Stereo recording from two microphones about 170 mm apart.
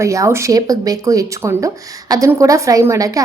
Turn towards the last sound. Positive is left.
turn(degrees=-20)  # may be behind; listen again after turning